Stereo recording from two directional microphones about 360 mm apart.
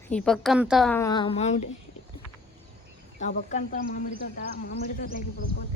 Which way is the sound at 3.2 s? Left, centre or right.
Centre.